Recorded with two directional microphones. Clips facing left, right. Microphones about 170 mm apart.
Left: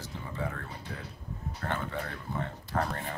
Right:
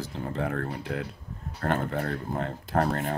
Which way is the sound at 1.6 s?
50° right (ahead or behind).